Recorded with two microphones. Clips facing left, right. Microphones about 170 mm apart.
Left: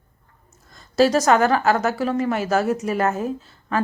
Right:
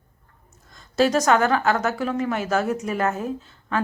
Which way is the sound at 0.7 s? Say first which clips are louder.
Left 3 dB; centre (ahead or behind).